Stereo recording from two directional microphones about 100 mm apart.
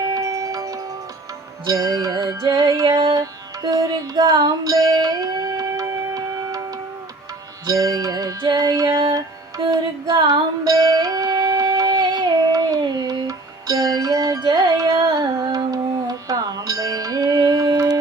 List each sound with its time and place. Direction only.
0.0 s music: 35° right (ahead or behind)
7.7 s music: 35° right (ahead or behind)
10.6 s music: 40° right (ahead or behind)